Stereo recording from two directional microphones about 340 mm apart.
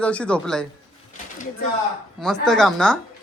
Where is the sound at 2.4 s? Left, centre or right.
Centre.